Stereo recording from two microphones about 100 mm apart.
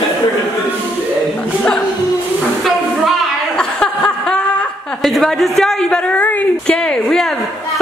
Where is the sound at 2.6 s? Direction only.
5° left (ahead or behind).